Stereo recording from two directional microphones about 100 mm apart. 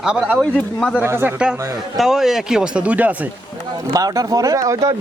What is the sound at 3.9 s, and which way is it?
Speech, 35° right (ahead or behind).